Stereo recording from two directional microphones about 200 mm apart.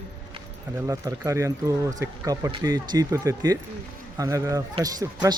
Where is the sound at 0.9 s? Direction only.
15° right (ahead or behind).